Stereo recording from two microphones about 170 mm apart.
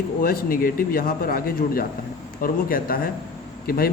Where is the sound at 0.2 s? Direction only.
60° left (ahead or behind).